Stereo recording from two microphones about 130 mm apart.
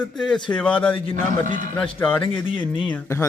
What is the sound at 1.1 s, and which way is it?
Speech, 80° right.